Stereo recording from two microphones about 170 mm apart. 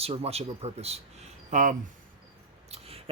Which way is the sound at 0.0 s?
35° right (ahead or behind).